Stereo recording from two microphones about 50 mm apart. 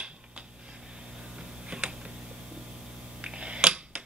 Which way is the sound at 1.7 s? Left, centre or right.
Centre.